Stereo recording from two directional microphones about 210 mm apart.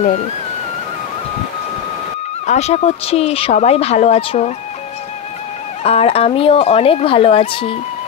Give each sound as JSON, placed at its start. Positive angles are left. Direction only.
{"t": 2.4, "sound": "speech", "side_deg": 30}
{"t": 5.9, "sound": "speech", "side_deg": 30}